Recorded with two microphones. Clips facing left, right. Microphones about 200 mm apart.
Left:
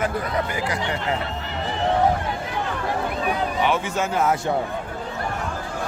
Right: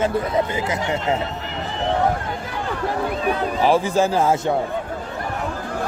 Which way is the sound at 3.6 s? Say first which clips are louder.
Right 9 dB; 35° right (ahead or behind).